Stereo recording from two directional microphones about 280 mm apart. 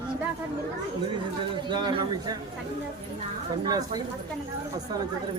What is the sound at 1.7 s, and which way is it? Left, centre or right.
Speech, centre.